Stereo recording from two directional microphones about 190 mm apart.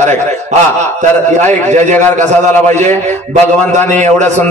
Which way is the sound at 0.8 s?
40° right (ahead or behind).